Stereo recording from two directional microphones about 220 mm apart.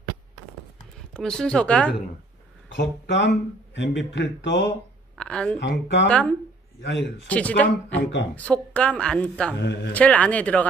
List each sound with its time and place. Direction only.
1.1 s a woman's voice: 5° left (ahead or behind)
2.7 s speech: 50° left (ahead or behind)
5.1 s a sound: 5° left (ahead or behind)
5.6 s speech: 50° left (ahead or behind)
6.0 s a woman's voice: 5° left (ahead or behind)
9.6 s speech: 50° left (ahead or behind)
9.9 s speech: 5° left (ahead or behind)